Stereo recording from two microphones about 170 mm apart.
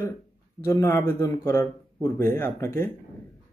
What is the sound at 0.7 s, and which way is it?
A man's voice, 15° left (ahead or behind).